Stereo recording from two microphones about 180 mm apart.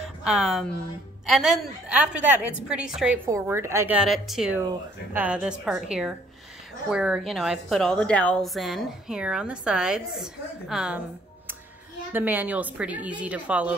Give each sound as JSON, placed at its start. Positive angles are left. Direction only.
{"t": 0.0, "sound": "a woman's voice", "side_deg": 0}
{"t": 3.3, "sound": "a woman's voice", "side_deg": -15}
{"t": 12.1, "sound": "a woman's voice", "side_deg": -10}